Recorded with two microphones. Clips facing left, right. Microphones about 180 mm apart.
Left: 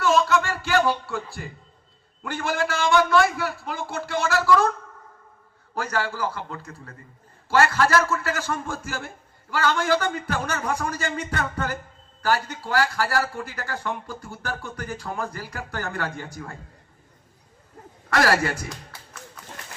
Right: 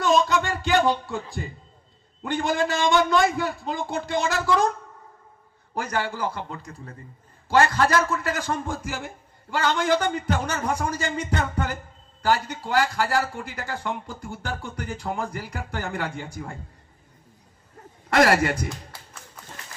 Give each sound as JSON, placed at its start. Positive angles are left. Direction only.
{"t": 0.0, "sound": "a sound", "side_deg": -15}
{"t": 2.2, "sound": "a man's voice", "side_deg": -20}
{"t": 5.7, "sound": "a man's voice", "side_deg": -15}
{"t": 18.1, "sound": "a man's voice", "side_deg": -25}